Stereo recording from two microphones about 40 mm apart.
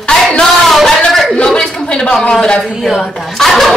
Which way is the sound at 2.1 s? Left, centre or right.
Centre.